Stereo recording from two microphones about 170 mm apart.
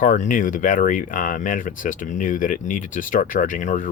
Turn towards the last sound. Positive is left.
turn(degrees=50)  # may be behind; listen again after turning